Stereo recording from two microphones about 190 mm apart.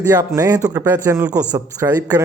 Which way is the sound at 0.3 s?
20° right (ahead or behind).